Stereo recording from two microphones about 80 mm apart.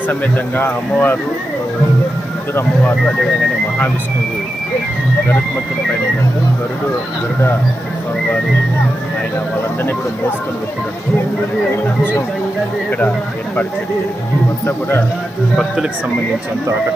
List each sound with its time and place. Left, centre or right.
0.1 s speech: left
14.6 s speech: left
15.5 s speech: centre